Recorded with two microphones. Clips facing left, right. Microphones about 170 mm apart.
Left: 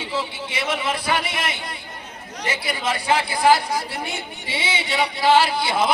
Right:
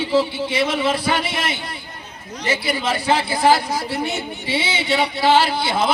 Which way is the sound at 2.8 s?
30° right (ahead or behind).